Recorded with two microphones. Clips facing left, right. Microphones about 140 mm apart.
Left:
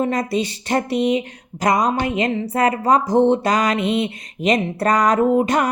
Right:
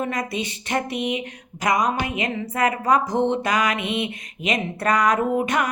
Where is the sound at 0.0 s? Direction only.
35° left (ahead or behind).